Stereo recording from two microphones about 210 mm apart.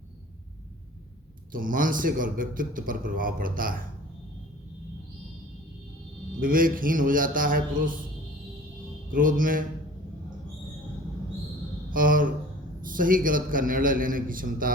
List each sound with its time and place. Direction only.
1.5 s a man's voice: 40° right (ahead or behind)
6.4 s a man's voice: 40° right (ahead or behind)
9.0 s a man's voice: 40° right (ahead or behind)
11.9 s a sound: 40° right (ahead or behind)
12.8 s a man's voice: 40° right (ahead or behind)